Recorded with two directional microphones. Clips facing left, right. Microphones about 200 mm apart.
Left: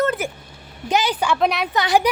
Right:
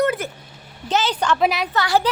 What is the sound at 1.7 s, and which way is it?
Speech, 15° left (ahead or behind).